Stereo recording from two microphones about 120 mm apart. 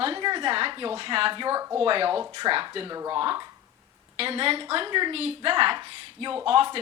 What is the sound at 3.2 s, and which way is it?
A woman's voice, 45° right (ahead or behind).